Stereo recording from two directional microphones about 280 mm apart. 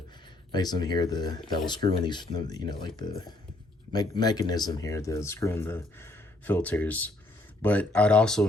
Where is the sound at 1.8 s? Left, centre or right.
Right.